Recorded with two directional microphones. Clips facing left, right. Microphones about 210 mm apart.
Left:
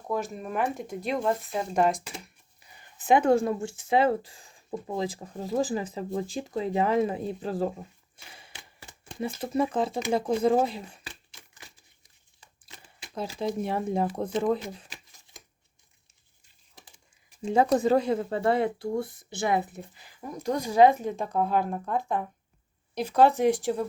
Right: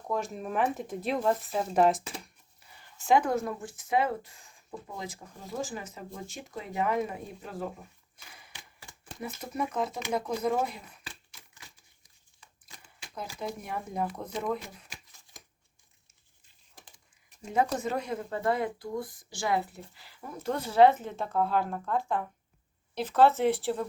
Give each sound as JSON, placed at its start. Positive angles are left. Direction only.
{"t": 0.1, "sound": "speech", "side_deg": 0}
{"t": 2.6, "sound": "speech", "side_deg": 15}
{"t": 13.1, "sound": "speech", "side_deg": 25}
{"t": 17.4, "sound": "speech", "side_deg": 30}